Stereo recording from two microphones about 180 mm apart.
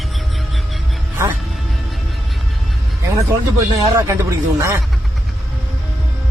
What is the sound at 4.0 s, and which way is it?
Speech, 15° right (ahead or behind).